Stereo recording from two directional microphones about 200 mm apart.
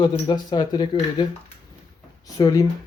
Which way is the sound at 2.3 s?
20° left (ahead or behind).